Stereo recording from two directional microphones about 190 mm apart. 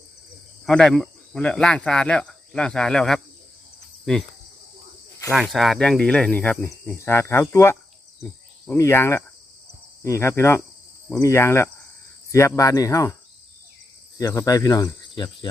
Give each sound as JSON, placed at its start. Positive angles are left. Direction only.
{"t": 0.6, "sound": "speech", "side_deg": 5}
{"t": 5.3, "sound": "speech", "side_deg": 0}
{"t": 14.2, "sound": "speech", "side_deg": 15}